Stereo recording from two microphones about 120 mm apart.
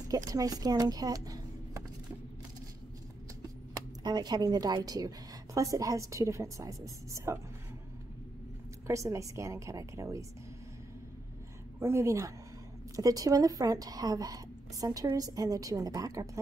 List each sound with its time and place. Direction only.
0.1 s speech: 30° right (ahead or behind)
4.0 s a woman's voice: 35° right (ahead or behind)
8.8 s a woman's voice: 25° right (ahead or behind)
11.8 s a woman's voice: 20° right (ahead or behind)